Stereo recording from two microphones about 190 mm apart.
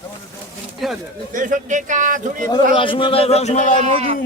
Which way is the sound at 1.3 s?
45° right (ahead or behind).